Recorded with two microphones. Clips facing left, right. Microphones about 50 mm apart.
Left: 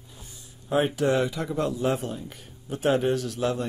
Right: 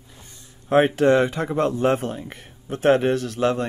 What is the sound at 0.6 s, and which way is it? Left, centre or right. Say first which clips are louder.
Speech: right 7 dB; right.